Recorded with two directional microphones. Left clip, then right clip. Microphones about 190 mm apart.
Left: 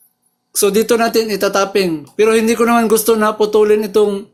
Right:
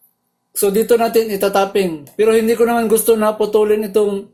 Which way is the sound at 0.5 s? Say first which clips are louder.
Left 1 dB; 30° left (ahead or behind).